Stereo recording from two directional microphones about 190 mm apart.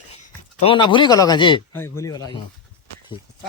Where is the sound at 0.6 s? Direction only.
25° left (ahead or behind).